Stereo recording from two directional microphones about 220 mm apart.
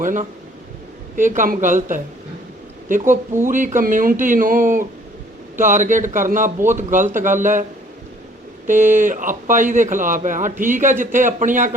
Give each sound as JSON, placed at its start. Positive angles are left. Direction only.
{"t": 0.0, "sound": "speech", "side_deg": -35}
{"t": 8.6, "sound": "speech", "side_deg": -35}